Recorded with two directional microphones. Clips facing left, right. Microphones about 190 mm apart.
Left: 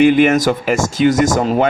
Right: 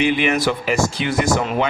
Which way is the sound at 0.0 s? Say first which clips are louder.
Left 7 dB; 45° left (ahead or behind).